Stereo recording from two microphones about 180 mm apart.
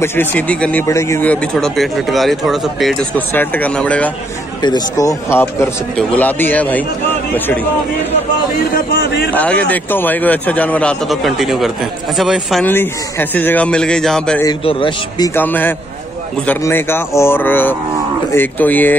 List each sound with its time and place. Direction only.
0.0 s speech: 10° left (ahead or behind)
4.6 s speech: 20° left (ahead or behind)
9.3 s speech: 10° left (ahead or behind)
12.6 s speech: 10° left (ahead or behind)
14.6 s a man's voice: 30° left (ahead or behind)
15.3 s speech: 10° left (ahead or behind)